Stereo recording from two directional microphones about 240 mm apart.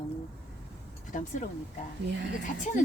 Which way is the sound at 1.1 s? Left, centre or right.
Left.